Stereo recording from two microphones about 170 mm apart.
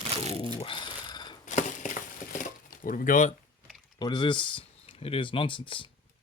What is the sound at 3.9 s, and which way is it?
Speech, 25° left (ahead or behind).